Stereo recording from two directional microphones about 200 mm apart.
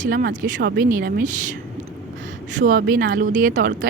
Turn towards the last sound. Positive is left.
turn(degrees=-40)  # may be behind; listen again after turning